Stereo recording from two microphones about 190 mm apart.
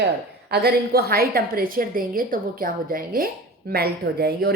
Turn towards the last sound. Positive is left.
turn(degrees=-55)  # may be behind; listen again after turning